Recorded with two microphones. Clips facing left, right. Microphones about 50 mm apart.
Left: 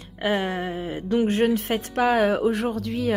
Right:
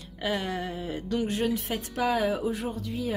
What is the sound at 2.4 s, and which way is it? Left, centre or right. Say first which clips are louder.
Speech: left 7 dB; left.